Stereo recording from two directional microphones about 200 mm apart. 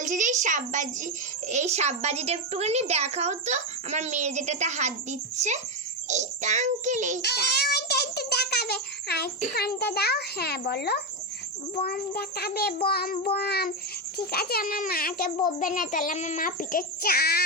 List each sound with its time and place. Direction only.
0.0 s a woman's voice: 40° right (ahead or behind)
7.2 s a sound: 55° left (ahead or behind)
9.6 s child singing: 50° left (ahead or behind)